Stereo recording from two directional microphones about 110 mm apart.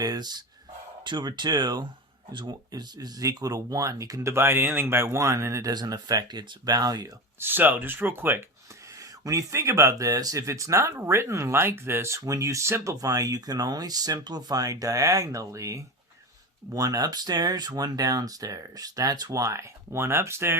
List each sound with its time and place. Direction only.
0.0 s a sound: 35° right (ahead or behind)
1.0 s speech: 40° right (ahead or behind)
7.3 s speech: 20° right (ahead or behind)
9.0 s speech: 30° right (ahead or behind)
19.5 s speech: 25° right (ahead or behind)